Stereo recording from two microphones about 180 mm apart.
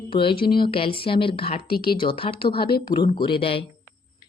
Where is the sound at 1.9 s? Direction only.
30° left (ahead or behind).